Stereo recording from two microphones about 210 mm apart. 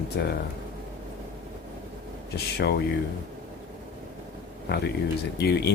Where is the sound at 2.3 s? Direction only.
50° left (ahead or behind).